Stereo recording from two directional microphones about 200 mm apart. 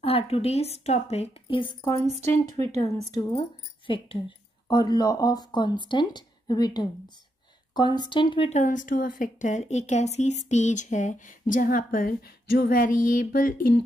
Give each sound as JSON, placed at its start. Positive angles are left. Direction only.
{"t": 0.0, "sound": "speech", "side_deg": 30}
{"t": 2.3, "sound": "speech", "side_deg": 15}